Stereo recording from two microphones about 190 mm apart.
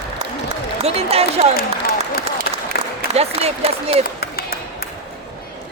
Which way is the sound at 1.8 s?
50° left (ahead or behind).